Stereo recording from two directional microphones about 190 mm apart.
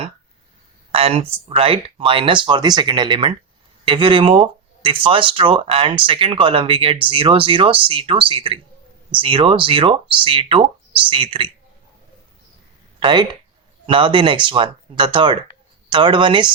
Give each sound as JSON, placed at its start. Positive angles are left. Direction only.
{"t": 0.9, "sound": "speech", "side_deg": -30}
{"t": 13.0, "sound": "speech", "side_deg": -25}